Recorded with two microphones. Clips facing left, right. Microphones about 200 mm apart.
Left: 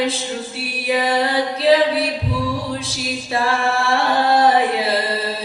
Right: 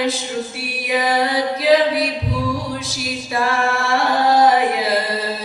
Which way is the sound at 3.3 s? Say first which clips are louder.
Even; 30° left (ahead or behind).